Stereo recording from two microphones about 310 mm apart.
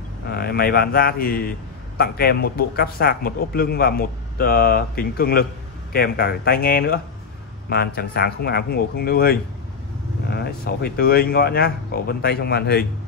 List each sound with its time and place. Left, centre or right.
0.3 s a man's voice: left